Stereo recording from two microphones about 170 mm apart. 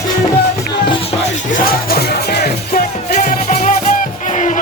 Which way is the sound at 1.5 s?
65° left (ahead or behind).